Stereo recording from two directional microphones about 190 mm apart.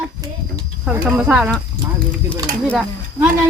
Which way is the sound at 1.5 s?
5° left (ahead or behind).